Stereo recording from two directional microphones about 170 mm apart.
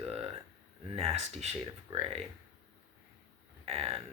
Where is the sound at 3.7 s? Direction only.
35° right (ahead or behind).